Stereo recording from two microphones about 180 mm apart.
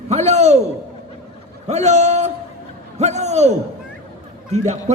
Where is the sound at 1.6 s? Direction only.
40° right (ahead or behind).